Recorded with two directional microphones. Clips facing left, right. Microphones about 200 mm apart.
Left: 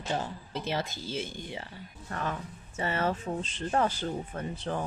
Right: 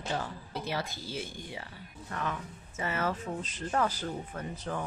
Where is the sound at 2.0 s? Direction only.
35° left (ahead or behind).